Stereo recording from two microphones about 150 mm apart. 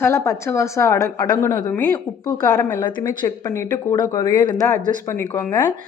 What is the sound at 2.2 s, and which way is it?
Speech, 20° left (ahead or behind).